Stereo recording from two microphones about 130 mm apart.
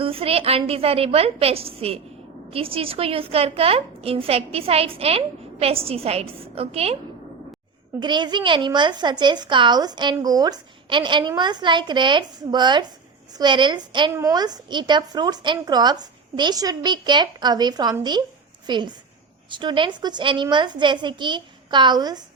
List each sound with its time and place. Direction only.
0.0 s a woman's voice: 45° right (ahead or behind)
7.9 s a woman's voice: 35° right (ahead or behind)